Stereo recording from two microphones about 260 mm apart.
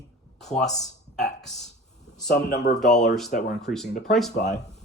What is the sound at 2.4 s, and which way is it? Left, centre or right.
Speech, left.